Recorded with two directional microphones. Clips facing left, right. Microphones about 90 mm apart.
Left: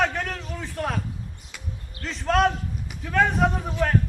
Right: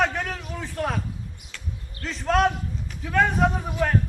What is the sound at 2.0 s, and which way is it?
A man's voice, centre (ahead or behind).